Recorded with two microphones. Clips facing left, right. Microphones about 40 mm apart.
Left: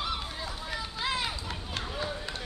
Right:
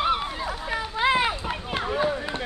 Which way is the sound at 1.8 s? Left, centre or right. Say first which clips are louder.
Right 12 dB; right.